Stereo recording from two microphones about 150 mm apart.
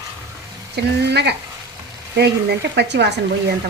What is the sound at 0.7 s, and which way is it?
A woman's voice, 90° right.